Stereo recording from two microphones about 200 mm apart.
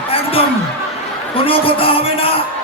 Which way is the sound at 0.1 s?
30° left (ahead or behind).